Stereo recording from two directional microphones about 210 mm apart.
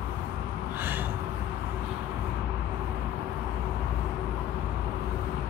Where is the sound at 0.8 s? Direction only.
10° right (ahead or behind).